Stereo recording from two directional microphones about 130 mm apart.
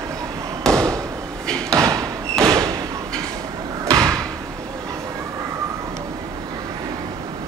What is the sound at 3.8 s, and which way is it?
Slam, 25° right (ahead or behind).